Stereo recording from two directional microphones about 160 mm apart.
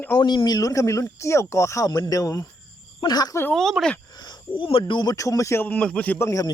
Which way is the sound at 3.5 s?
Centre (ahead or behind).